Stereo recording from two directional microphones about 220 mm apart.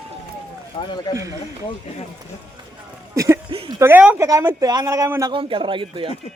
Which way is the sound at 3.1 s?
15° right (ahead or behind).